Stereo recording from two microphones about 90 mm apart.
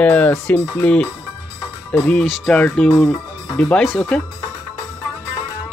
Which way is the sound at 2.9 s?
35° left (ahead or behind).